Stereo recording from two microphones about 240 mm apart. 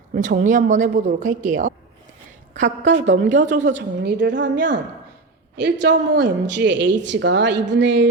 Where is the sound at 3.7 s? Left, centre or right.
Right.